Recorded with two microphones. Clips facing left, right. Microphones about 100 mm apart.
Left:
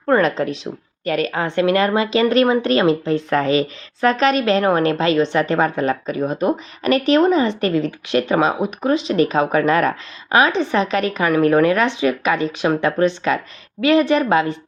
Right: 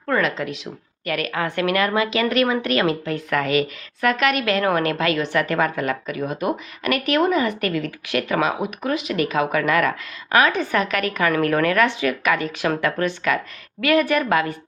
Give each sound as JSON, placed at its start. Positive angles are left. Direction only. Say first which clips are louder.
{"t": 0.1, "sound": "a woman's voice", "louder": "left 6 dB", "side_deg": 35}